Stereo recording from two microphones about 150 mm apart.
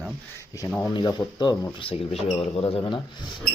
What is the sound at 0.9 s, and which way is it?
Speech, 30° left (ahead or behind).